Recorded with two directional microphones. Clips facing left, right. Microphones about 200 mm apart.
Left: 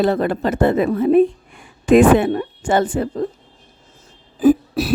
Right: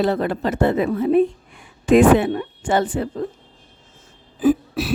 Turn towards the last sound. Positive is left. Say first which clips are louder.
# left 4 dB
turn(degrees=40)  # may be behind; listen again after turning